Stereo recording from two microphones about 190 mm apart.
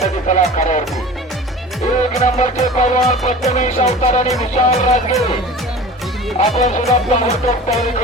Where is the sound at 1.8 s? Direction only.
35° left (ahead or behind).